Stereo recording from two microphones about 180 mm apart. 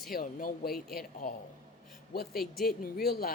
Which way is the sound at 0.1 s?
55° left (ahead or behind).